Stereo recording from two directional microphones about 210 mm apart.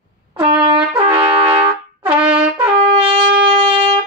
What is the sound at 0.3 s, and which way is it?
Brass instrument, 20° right (ahead or behind).